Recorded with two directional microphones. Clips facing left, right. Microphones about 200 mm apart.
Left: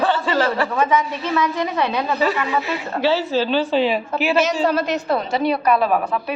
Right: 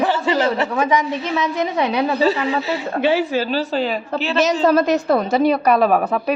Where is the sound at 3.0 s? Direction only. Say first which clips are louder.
Even; 15° right (ahead or behind).